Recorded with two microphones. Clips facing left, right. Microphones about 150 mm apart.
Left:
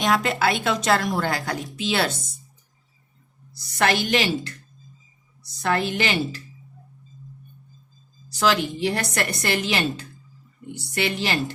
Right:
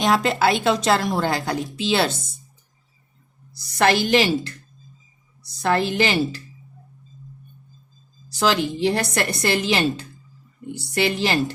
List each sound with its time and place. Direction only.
0.0 s a woman's voice: 30° right (ahead or behind)
3.8 s a woman's voice: 30° right (ahead or behind)
8.4 s a woman's voice: 30° right (ahead or behind)